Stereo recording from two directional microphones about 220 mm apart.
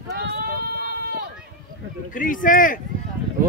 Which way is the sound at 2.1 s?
40° left (ahead or behind).